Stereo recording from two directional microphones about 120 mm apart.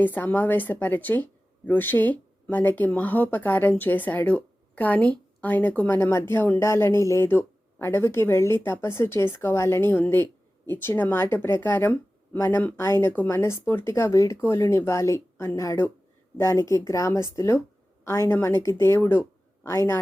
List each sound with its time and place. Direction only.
0.0 s speech: 15° left (ahead or behind)